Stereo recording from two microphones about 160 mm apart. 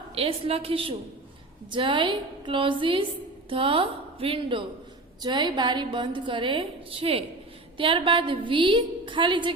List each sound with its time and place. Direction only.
0.1 s a woman's voice: 35° right (ahead or behind)